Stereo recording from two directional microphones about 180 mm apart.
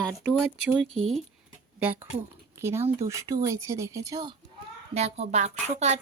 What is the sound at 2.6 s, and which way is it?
Speech, 15° right (ahead or behind).